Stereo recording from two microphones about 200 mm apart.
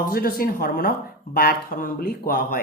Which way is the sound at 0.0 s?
45° left (ahead or behind).